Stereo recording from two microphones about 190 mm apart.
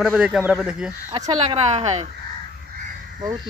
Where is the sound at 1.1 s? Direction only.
20° right (ahead or behind).